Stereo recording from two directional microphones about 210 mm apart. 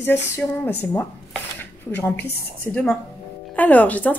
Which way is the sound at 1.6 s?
10° left (ahead or behind).